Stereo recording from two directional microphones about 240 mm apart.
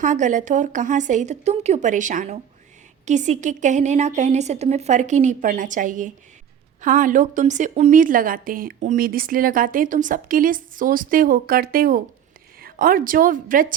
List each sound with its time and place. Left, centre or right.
0.0 s a woman's voice: right